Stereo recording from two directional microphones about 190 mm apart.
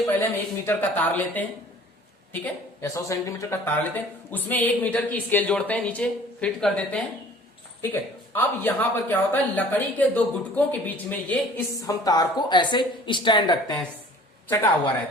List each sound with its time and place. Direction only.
0.2 s speech: 10° left (ahead or behind)
8.3 s a woman's voice: 10° left (ahead or behind)
14.4 s a man's voice: 10° left (ahead or behind)